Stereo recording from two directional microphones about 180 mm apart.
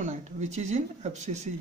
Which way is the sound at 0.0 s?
40° right (ahead or behind).